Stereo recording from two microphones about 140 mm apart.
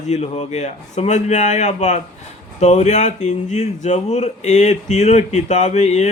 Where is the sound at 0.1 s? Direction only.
50° left (ahead or behind).